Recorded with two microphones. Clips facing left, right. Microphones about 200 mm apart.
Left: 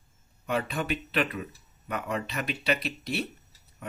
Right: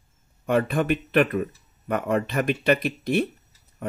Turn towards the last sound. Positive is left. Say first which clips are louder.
# right 9 dB
turn(degrees=-50)  # may be behind; listen again after turning